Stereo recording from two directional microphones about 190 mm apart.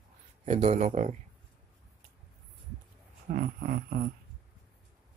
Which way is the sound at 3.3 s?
50° right (ahead or behind).